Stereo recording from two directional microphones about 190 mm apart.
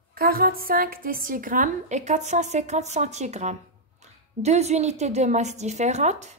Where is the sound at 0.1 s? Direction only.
50° right (ahead or behind).